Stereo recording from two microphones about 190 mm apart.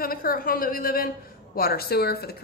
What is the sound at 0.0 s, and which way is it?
A woman's voice, 50° left (ahead or behind).